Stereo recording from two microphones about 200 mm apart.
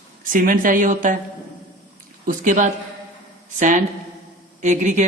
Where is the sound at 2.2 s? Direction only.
40° right (ahead or behind).